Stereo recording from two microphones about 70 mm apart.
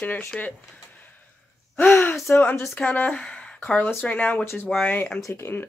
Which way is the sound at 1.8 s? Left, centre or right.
Left.